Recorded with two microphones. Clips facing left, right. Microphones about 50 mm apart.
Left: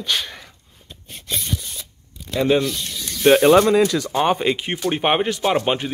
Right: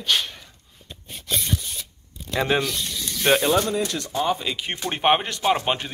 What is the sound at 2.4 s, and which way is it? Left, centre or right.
Speech, centre.